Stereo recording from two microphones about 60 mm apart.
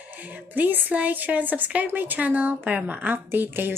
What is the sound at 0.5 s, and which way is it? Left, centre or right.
A woman's voice, right.